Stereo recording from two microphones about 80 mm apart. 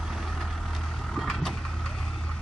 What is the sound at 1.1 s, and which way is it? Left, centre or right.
Vehicle, centre.